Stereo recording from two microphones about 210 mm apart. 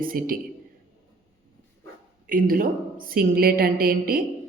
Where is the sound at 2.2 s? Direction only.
40° right (ahead or behind).